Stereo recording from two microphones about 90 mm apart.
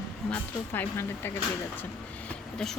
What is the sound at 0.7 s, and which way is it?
Speech, 25° left (ahead or behind).